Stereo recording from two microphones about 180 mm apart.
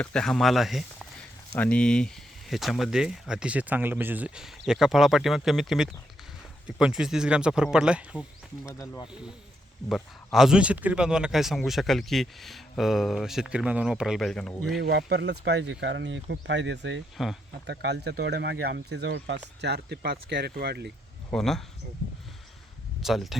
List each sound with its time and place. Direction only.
0.0 s speech: 5° left (ahead or behind)
8.8 s speech: 20° left (ahead or behind)
9.9 s speech: centre (ahead or behind)
14.8 s speech: 65° right (ahead or behind)
17.2 s speech: centre (ahead or behind)
17.7 s speech: 70° right (ahead or behind)
21.3 s speech: centre (ahead or behind)
23.0 s speech: centre (ahead or behind)